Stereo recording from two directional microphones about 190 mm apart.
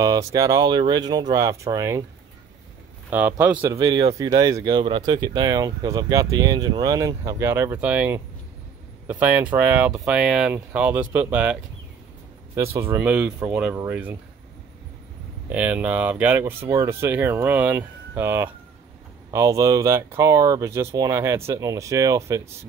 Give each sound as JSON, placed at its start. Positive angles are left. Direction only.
{"t": 0.0, "sound": "speech", "side_deg": -15}
{"t": 3.1, "sound": "speech", "side_deg": -10}
{"t": 12.7, "sound": "speech", "side_deg": -15}
{"t": 15.5, "sound": "speech", "side_deg": -10}